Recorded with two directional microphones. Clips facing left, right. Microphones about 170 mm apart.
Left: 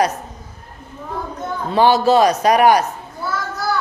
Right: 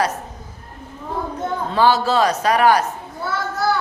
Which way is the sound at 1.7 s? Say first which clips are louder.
Left 4 dB; 15° left (ahead or behind).